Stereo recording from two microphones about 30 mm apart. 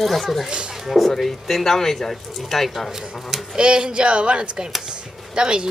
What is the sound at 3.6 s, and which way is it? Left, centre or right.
A woman's voice, right.